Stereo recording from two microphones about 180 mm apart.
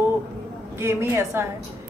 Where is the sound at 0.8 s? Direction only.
15° right (ahead or behind).